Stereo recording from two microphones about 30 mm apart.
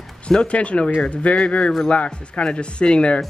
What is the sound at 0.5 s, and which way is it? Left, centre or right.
Speech, left.